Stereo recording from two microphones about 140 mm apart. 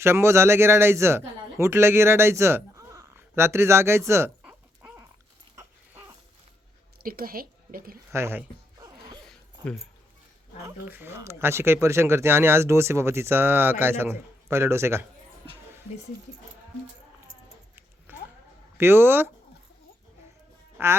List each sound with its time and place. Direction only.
0.0 s a man's voice: 20° right (ahead or behind)
7.0 s a woman's voice: 90° right
8.1 s a sound: 15° right (ahead or behind)
9.2 s zipper: 5° left (ahead or behind)
10.6 s speech: 15° right (ahead or behind)
18.1 s a sound: 15° right (ahead or behind)
18.8 s speech: 15° right (ahead or behind)
20.7 s speech: 15° right (ahead or behind)